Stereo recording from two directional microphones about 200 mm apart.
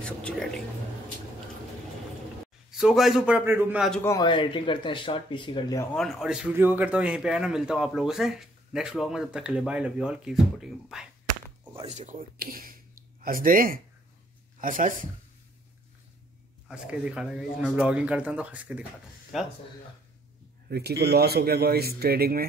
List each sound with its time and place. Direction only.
2.7 s a man's voice: centre (ahead or behind)
4.0 s speech: 20° left (ahead or behind)
5.9 s a man's voice: centre (ahead or behind)
11.7 s a man's voice: 30° right (ahead or behind)
16.6 s a man's voice: 5° right (ahead or behind)
20.7 s a man's voice: 55° right (ahead or behind)